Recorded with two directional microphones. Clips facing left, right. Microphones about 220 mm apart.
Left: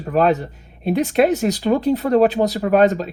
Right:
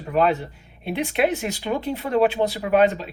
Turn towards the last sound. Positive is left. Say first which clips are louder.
# left 4 dB
turn(degrees=40)  # may be behind; listen again after turning